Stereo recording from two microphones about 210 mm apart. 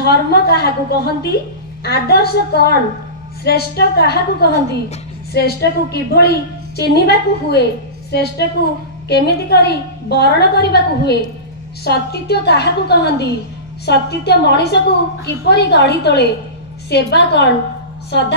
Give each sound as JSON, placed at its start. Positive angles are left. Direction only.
{"t": 0.0, "sound": "a woman's voice", "side_deg": 50}